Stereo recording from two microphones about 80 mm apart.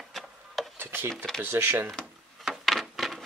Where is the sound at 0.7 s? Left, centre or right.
Right.